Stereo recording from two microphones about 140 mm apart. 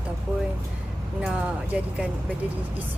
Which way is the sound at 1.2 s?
5° right (ahead or behind).